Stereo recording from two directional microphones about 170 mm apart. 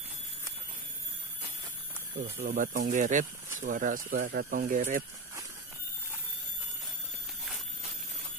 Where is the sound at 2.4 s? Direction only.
50° right (ahead or behind).